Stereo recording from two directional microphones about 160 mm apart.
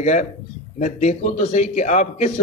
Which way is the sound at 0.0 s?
50° left (ahead or behind).